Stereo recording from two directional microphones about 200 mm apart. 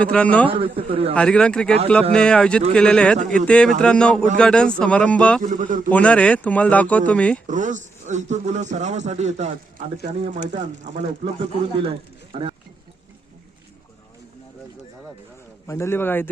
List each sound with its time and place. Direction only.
0.0 s speech: 5° left (ahead or behind)
0.4 s a man's voice: 25° right (ahead or behind)
1.1 s speech: 5° left (ahead or behind)
5.4 s a man's voice: 40° right (ahead or behind)
5.9 s speech: 5° left (ahead or behind)
7.4 s a man's voice: 40° right (ahead or behind)
15.6 s speech: 15° left (ahead or behind)